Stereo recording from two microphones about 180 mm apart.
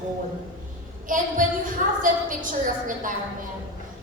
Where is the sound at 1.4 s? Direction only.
45° right (ahead or behind).